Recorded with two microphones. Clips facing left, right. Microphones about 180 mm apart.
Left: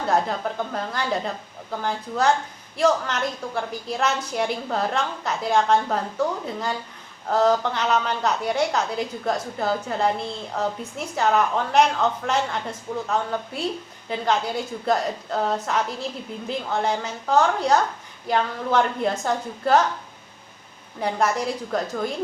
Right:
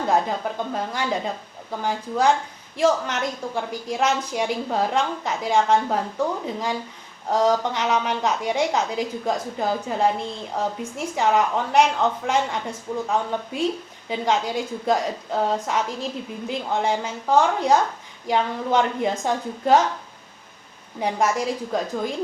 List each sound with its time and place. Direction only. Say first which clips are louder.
0.1 s a woman's voice: even; 15° right (ahead or behind)
21.0 s a woman's voice: right 1 dB; 15° right (ahead or behind)